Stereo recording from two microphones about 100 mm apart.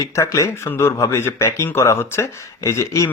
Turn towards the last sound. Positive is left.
turn(degrees=30)  # may be behind; listen again after turning